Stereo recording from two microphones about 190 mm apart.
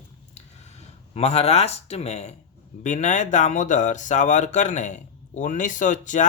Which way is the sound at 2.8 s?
40° left (ahead or behind).